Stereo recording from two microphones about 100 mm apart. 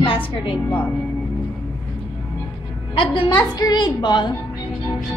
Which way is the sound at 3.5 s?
45° left (ahead or behind).